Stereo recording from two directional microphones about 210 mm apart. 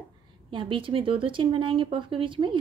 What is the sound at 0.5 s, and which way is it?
Speech, 25° right (ahead or behind).